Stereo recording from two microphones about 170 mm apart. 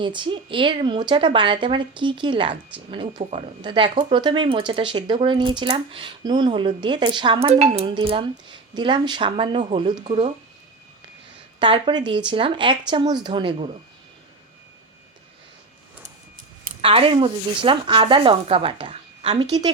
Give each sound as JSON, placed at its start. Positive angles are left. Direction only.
{"t": 0.0, "sound": "speech", "side_deg": -30}
{"t": 7.5, "sound": "speech", "side_deg": -40}
{"t": 10.1, "sound": "speech", "side_deg": -40}
{"t": 11.6, "sound": "speech", "side_deg": -30}
{"t": 16.8, "sound": "speech", "side_deg": -35}